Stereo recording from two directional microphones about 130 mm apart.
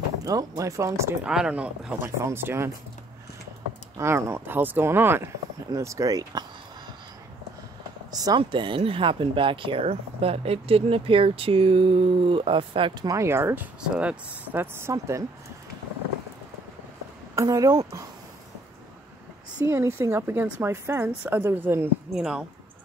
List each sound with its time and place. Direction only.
0.2 s a woman's voice: 30° right (ahead or behind)
1.2 s speech: 5° right (ahead or behind)
2.2 s a woman's voice: 20° right (ahead or behind)
3.9 s a woman's voice: 20° right (ahead or behind)
8.1 s speech: 30° right (ahead or behind)
17.4 s a woman's voice: 25° right (ahead or behind)
19.6 s a woman's voice: 20° right (ahead or behind)
22.1 s speech: 5° right (ahead or behind)